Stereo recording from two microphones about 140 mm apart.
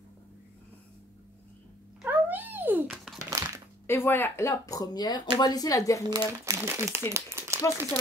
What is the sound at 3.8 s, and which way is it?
Speech, 15° left (ahead or behind).